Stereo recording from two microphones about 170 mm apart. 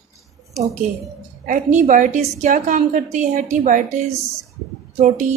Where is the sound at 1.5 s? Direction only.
50° right (ahead or behind).